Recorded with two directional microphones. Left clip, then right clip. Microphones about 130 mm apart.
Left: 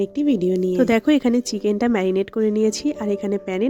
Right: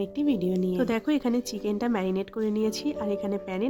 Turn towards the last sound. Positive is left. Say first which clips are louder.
# left 7 dB
turn(degrees=45)  # may be behind; listen again after turning